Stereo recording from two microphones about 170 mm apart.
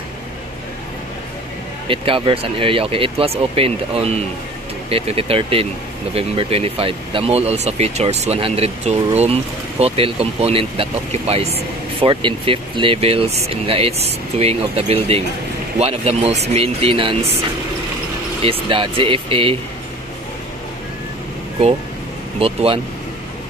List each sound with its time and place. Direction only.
1.9 s speech: 30° right (ahead or behind)
18.4 s speech: 30° right (ahead or behind)
22.4 s speech: 35° right (ahead or behind)